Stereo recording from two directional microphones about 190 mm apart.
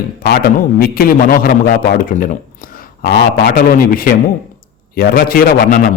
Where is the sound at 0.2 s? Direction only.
55° left (ahead or behind).